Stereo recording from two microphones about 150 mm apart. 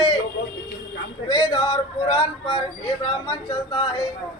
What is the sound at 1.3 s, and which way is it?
Speech, 30° left (ahead or behind).